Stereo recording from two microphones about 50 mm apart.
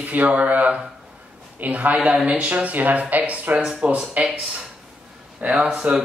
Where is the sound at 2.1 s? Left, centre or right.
Right.